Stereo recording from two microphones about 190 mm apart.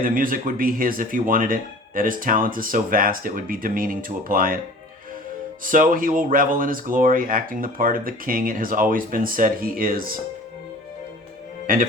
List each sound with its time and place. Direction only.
0.0 s speech: 45° right (ahead or behind)
5.6 s speech: 45° right (ahead or behind)
11.6 s speech: 45° right (ahead or behind)